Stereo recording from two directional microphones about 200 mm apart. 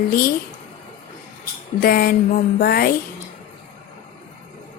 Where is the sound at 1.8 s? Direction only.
50° left (ahead or behind).